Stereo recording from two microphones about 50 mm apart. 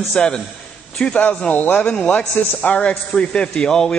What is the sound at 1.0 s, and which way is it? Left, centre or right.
Speech, left.